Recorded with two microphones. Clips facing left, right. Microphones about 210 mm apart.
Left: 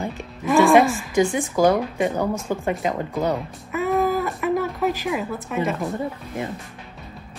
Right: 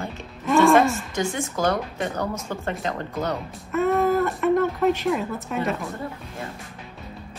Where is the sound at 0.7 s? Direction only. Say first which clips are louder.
Left 3 dB; 15° left (ahead or behind).